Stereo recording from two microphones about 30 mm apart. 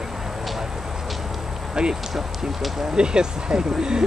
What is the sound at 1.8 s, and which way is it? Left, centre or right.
Speech, right.